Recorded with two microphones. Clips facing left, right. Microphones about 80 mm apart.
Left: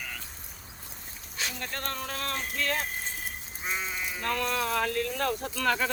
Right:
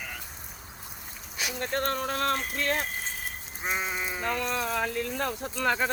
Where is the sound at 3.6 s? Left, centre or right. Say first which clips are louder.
Right 3 dB; right.